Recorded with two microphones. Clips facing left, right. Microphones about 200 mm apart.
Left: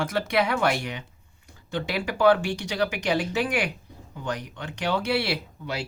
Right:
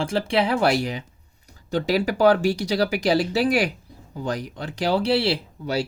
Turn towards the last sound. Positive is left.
turn(degrees=-35)  # may be behind; listen again after turning